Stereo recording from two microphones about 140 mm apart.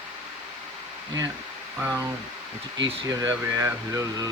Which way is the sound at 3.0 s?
25° right (ahead or behind).